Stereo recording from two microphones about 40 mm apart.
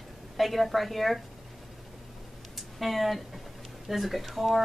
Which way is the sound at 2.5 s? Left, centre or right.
Centre.